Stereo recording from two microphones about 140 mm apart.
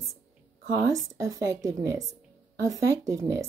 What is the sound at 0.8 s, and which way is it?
Speech, 25° right (ahead or behind).